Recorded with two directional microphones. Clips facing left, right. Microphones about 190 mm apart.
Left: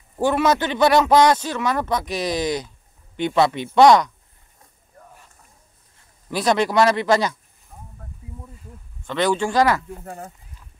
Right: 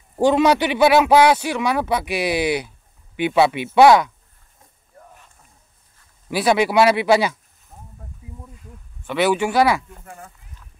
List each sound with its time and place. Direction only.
0.2 s a man's voice: 15° right (ahead or behind)
6.3 s a man's voice: 10° right (ahead or behind)
8.6 s speech: 10° right (ahead or behind)
10.0 s speech: 40° left (ahead or behind)